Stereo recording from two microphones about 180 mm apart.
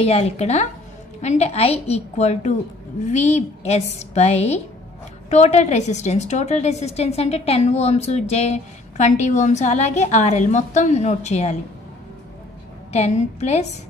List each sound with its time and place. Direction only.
0.0 s a woman's voice: 35° left (ahead or behind)
12.9 s a woman's voice: 40° left (ahead or behind)